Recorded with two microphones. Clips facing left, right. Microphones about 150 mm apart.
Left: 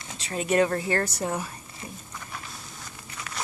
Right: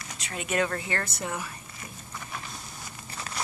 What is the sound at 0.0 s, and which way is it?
Speech, 25° left (ahead or behind).